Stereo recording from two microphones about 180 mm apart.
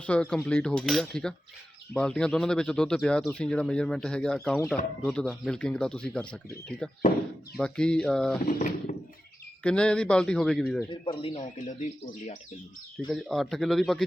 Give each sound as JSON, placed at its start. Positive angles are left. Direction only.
{"t": 0.0, "sound": "speech", "side_deg": 5}
{"t": 8.4, "sound": "speech", "side_deg": 45}
{"t": 9.6, "sound": "speech", "side_deg": 5}
{"t": 11.0, "sound": "speech", "side_deg": 30}
{"t": 11.5, "sound": "speech", "side_deg": 45}
{"t": 13.1, "sound": "speech", "side_deg": 0}